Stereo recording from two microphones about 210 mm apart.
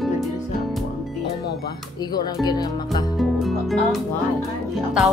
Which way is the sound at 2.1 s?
20° left (ahead or behind).